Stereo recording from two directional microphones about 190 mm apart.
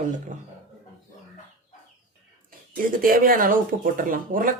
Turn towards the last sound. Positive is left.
turn(degrees=-45)  # may be behind; listen again after turning